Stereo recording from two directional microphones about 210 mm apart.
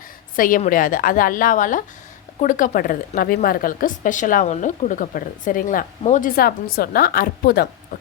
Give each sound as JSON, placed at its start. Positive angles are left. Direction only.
{"t": 0.3, "sound": "a woman's voice", "side_deg": 40}